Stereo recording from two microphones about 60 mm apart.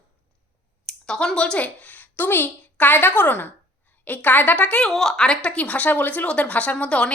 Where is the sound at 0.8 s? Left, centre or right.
Centre.